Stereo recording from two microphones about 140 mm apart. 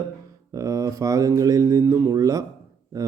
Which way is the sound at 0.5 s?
25° right (ahead or behind).